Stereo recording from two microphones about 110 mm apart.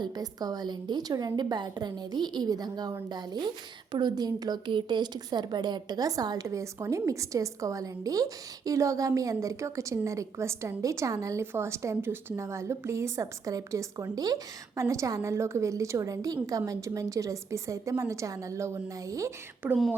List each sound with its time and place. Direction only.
0.0 s a woman's voice: 35° right (ahead or behind)